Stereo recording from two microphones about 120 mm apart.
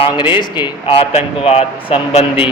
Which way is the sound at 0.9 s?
55° left (ahead or behind).